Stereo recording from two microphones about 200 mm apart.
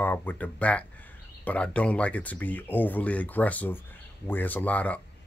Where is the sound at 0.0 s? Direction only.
10° left (ahead or behind).